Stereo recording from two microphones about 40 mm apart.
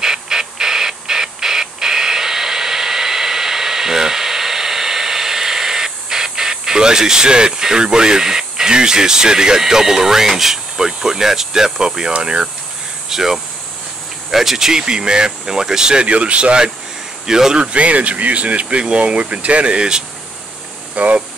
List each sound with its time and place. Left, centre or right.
0.0 s music: centre
12.2 s speech: right
13.1 s speech: centre
16.1 s speech: right; by 17.6 s centre
17.7 s speech: right
20.9 s speech: right